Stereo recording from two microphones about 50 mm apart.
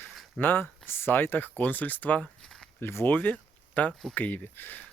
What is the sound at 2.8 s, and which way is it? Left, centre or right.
Speech, left.